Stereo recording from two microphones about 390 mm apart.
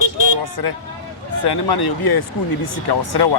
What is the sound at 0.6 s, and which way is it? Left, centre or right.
Speech, left.